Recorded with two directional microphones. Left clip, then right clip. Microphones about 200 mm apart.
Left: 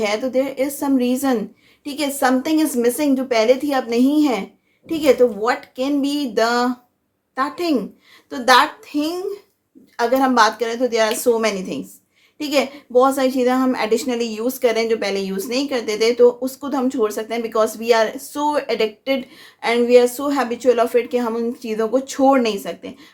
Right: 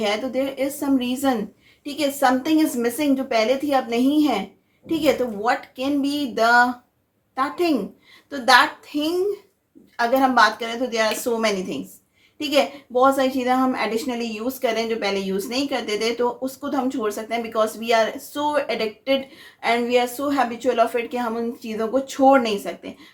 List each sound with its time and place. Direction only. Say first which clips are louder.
0.0 s a woman's voice: left 3 dB; 40° left (ahead or behind)